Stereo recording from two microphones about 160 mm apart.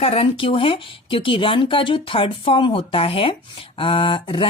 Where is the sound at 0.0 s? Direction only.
35° left (ahead or behind).